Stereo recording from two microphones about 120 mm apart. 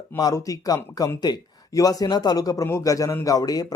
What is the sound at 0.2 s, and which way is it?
A man's voice, 30° left (ahead or behind).